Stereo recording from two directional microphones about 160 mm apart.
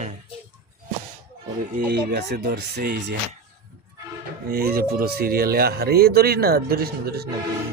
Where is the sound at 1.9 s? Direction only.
90° right.